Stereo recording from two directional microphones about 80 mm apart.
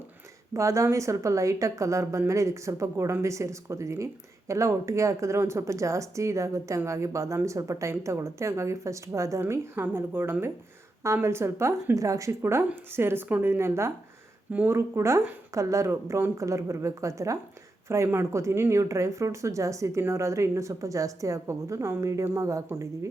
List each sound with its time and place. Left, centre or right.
0.5 s a woman's voice: right